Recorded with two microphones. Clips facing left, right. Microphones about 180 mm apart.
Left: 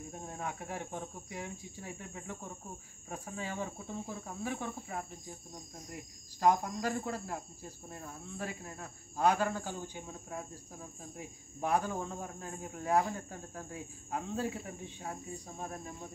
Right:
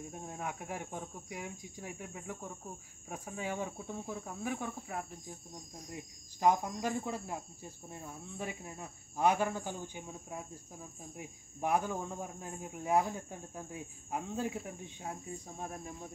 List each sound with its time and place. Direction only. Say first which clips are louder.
0.3 s cricket: left 1 dB; 10° right (ahead or behind)
6.4 s cricket: left 1 dB; 15° right (ahead or behind)